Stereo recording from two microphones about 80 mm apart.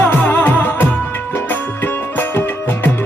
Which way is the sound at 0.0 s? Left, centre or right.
Left.